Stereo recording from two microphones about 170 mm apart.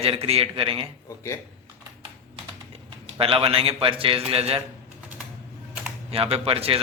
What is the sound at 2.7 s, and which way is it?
Speech, 35° right (ahead or behind).